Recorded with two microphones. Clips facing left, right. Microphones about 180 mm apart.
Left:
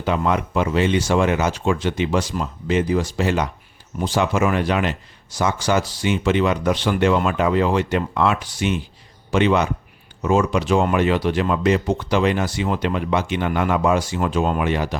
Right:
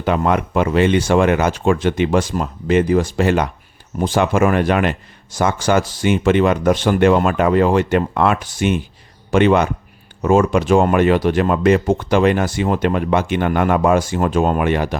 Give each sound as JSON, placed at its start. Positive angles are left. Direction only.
{"t": 0.0, "sound": "speech", "side_deg": -55}